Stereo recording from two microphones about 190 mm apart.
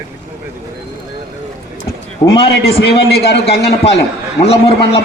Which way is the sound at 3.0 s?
60° left (ahead or behind).